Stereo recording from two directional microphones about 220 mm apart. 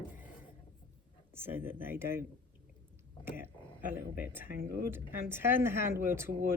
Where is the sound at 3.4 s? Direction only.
10° right (ahead or behind).